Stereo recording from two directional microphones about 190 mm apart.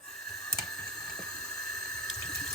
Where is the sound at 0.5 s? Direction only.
5° left (ahead or behind).